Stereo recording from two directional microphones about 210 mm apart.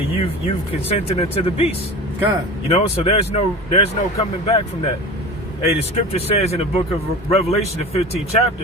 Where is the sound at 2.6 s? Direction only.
30° left (ahead or behind).